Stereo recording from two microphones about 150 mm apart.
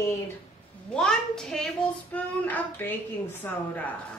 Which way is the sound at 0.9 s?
5° left (ahead or behind).